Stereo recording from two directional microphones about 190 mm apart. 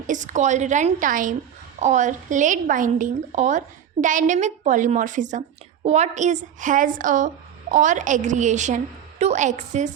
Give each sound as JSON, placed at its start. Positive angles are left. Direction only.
{"t": 0.1, "sound": "a woman's voice", "side_deg": -40}